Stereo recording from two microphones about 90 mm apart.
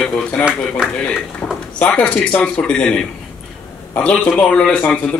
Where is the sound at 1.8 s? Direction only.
15° left (ahead or behind).